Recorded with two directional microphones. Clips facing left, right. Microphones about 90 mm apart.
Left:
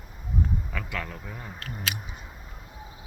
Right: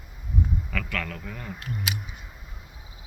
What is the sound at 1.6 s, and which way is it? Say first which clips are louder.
Speech: even; 15° right (ahead or behind).